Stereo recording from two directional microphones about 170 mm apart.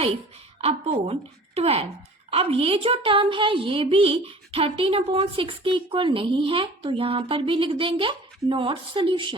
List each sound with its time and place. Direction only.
0.6 s a woman's voice: 35° right (ahead or behind)